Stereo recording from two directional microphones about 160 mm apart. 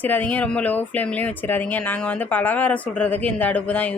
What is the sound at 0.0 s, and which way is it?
Speech, 10° left (ahead or behind).